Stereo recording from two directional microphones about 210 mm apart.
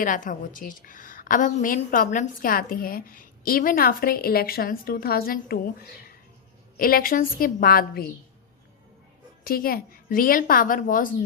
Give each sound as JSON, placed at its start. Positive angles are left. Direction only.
{"t": 0.0, "sound": "a woman's voice", "side_deg": 40}
{"t": 9.4, "sound": "a woman's voice", "side_deg": 45}